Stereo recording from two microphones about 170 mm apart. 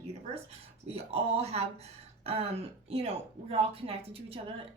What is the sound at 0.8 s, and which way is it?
Speech, 35° right (ahead or behind).